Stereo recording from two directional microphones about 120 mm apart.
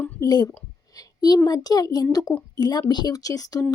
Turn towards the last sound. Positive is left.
turn(degrees=30)  # may be behind; listen again after turning